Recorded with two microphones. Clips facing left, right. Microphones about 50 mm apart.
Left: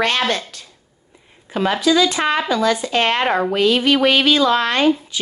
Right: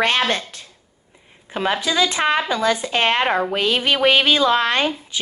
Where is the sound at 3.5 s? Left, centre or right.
Right.